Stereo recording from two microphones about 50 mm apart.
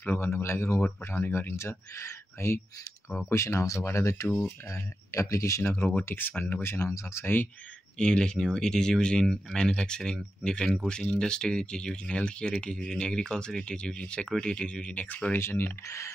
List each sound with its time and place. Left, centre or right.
0.2 s speech: left
1.1 s speech: left
1.6 s speech: left
4.6 s speech: left
6.0 s speech: left
6.6 s speech: left
8.0 s speech: centre
15.0 s speech: left
15.3 s speech: left